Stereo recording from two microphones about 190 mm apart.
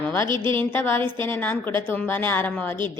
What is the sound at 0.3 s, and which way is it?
Speech, 25° right (ahead or behind).